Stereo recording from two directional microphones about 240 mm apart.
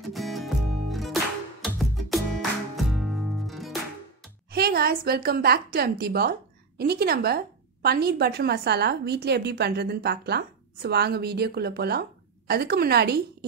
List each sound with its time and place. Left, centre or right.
0.1 s music: centre
4.5 s a woman's voice: right